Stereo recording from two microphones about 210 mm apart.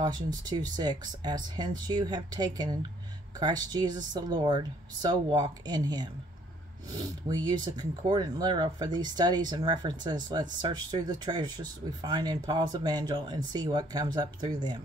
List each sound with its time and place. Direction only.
0.5 s speech: 20° right (ahead or behind)